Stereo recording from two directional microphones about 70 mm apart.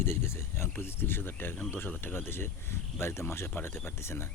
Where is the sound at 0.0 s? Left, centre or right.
Left.